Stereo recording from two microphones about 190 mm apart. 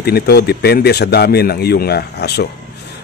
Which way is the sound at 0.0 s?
55° left (ahead or behind).